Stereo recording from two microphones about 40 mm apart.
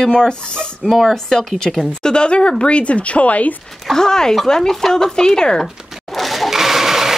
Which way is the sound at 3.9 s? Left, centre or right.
Centre.